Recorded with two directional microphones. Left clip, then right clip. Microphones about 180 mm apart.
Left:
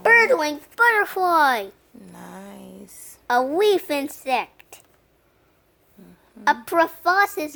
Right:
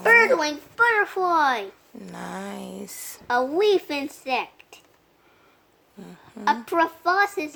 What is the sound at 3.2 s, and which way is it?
Speech, 65° left (ahead or behind).